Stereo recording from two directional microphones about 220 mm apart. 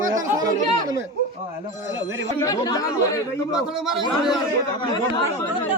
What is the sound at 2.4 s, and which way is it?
Speech, 15° left (ahead or behind).